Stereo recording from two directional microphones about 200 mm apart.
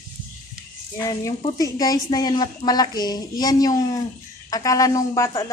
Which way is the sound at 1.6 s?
20° left (ahead or behind).